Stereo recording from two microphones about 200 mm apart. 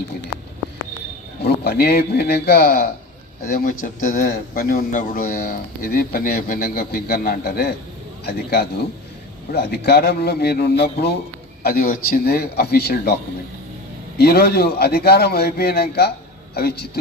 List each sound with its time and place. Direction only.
1.5 s a man's voice: 50° left (ahead or behind)
14.2 s a man's voice: 50° left (ahead or behind)